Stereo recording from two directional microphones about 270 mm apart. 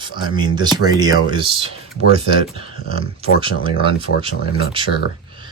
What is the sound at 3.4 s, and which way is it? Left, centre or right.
Speech, centre.